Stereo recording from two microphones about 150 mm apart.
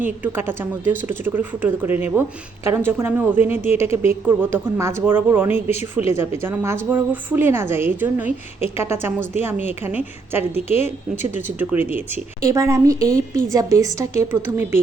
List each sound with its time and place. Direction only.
0.0 s speech: 15° right (ahead or behind)
11.6 s speech: 10° right (ahead or behind)